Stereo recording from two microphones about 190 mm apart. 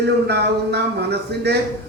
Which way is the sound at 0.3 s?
60° right (ahead or behind).